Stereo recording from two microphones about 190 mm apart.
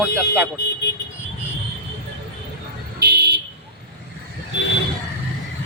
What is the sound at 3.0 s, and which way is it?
Vehicle, 60° right (ahead or behind).